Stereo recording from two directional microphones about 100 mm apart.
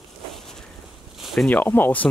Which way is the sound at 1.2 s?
Centre (ahead or behind).